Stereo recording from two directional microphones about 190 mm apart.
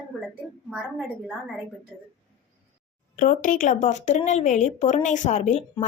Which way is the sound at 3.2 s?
40° left (ahead or behind).